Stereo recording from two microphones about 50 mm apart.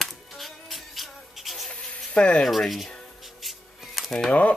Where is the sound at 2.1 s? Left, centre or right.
Left.